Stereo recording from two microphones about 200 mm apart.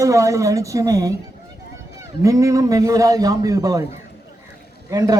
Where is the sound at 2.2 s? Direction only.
15° right (ahead or behind).